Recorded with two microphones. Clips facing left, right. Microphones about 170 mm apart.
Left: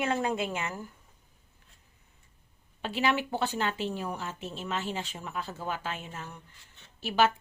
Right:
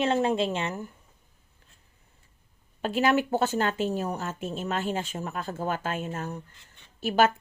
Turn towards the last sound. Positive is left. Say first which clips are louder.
# right 3 dB
turn(degrees=-50)  # may be behind; listen again after turning